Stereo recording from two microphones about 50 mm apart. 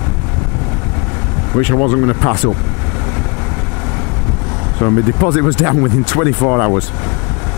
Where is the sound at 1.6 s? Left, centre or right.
Left.